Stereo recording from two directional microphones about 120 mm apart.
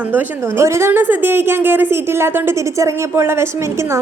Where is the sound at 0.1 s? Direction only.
20° right (ahead or behind).